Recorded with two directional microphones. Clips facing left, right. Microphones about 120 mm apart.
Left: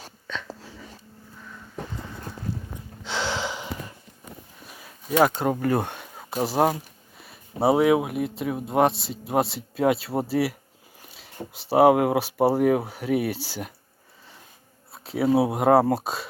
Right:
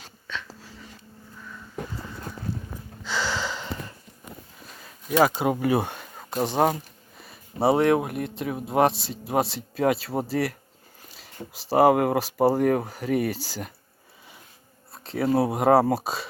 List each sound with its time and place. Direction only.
3.0 s gasp: 20° left (ahead or behind)
4.6 s speech: 5° left (ahead or behind)
14.9 s speech: 5° left (ahead or behind)